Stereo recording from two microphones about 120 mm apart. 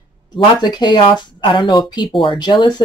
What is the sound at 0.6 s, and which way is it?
Speech, 40° left (ahead or behind).